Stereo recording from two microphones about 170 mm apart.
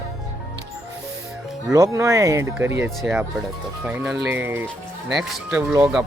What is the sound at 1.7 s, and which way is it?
Speech, 20° right (ahead or behind).